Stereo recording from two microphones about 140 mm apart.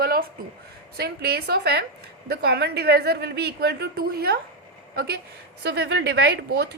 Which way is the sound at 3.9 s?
90° right.